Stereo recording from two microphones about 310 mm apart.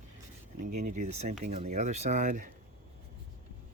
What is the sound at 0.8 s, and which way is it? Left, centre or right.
Speech, right.